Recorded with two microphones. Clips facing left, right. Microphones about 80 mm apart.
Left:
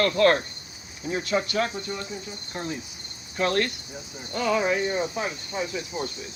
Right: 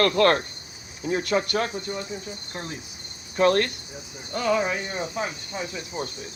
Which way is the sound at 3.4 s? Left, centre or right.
Right.